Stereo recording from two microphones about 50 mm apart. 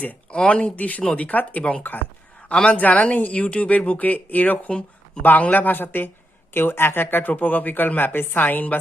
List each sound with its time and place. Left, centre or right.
0.0 s speech: left
5.2 s speech: left